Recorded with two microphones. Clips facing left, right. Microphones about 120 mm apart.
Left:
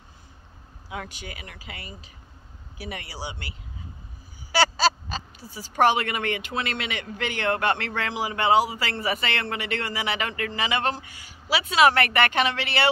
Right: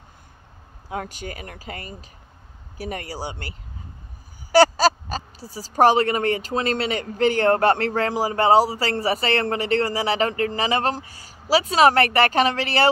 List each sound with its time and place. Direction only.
0.8 s speech: 45° right (ahead or behind)